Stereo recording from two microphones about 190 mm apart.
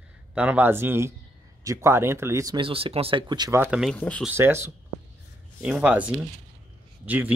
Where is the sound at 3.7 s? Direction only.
5° left (ahead or behind).